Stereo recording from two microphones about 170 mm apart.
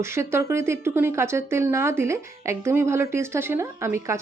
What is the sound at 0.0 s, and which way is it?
Speech, 15° right (ahead or behind).